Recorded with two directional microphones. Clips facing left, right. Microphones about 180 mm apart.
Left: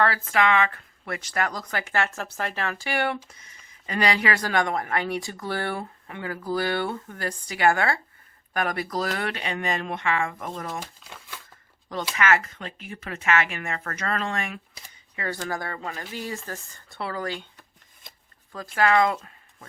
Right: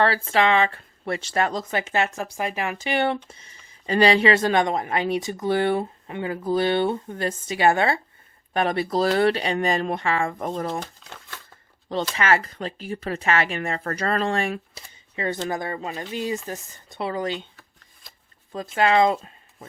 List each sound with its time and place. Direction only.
0.3 s speech: 30° right (ahead or behind)
11.0 s shuffling cards: 10° left (ahead or behind)
12.1 s speech: 30° right (ahead or behind)
18.5 s speech: 25° right (ahead or behind)